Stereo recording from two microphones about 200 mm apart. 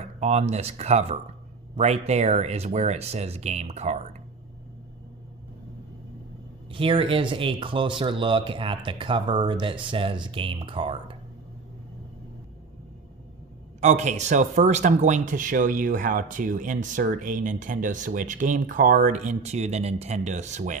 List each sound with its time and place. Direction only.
0.0 s speech: 35° right (ahead or behind)
6.7 s speech: 25° right (ahead or behind)
13.7 s speech: 35° right (ahead or behind)